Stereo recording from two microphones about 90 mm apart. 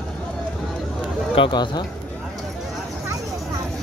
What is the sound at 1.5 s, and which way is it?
Speech, 55° left (ahead or behind).